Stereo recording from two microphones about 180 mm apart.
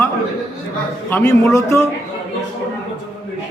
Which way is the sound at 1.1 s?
15° left (ahead or behind).